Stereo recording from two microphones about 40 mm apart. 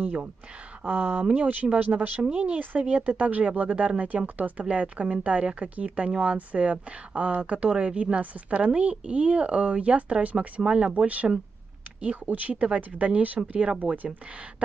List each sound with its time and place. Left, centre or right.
0.0 s speech: right
1.2 s a woman's voice: right